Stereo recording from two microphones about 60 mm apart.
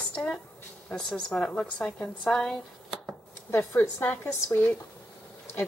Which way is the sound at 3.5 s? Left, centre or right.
Left.